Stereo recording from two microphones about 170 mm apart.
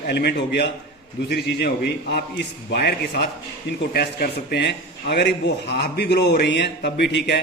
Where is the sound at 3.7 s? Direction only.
70° left (ahead or behind).